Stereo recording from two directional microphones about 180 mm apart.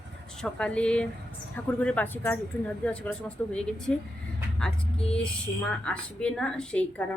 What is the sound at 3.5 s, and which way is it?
Speech, 5° left (ahead or behind).